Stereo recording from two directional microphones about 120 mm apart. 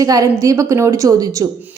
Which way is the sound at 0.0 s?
30° right (ahead or behind).